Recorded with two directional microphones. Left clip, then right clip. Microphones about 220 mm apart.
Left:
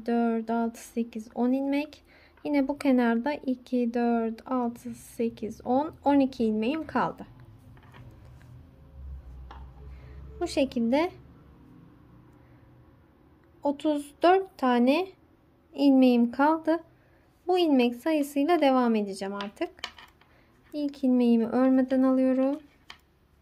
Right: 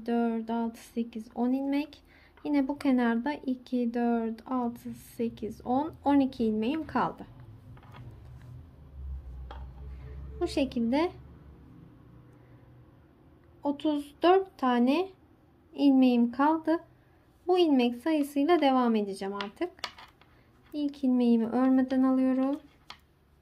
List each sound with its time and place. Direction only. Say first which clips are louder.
0.0 s speech: left 3 dB; 20° left (ahead or behind)
10.4 s speech: left 3 dB; 20° left (ahead or behind)
13.6 s speech: left 3 dB; 20° left (ahead or behind)